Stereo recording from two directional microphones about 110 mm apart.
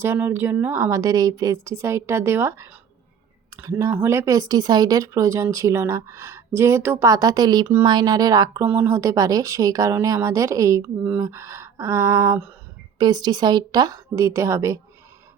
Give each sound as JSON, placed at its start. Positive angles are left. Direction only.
{"t": 0.0, "sound": "speech", "side_deg": -20}
{"t": 0.8, "sound": "a woman's voice", "side_deg": -30}
{"t": 8.6, "sound": "speech", "side_deg": -15}
{"t": 10.8, "sound": "speech", "side_deg": -10}
{"t": 11.2, "sound": "a woman's voice", "side_deg": -25}